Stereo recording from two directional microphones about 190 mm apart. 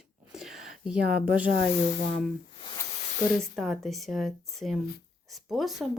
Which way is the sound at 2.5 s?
25° left (ahead or behind).